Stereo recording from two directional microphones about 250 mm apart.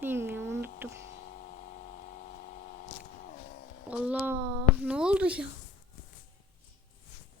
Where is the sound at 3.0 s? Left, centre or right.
Left.